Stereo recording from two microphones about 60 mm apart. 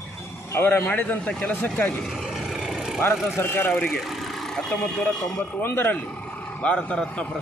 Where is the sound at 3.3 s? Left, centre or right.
Left.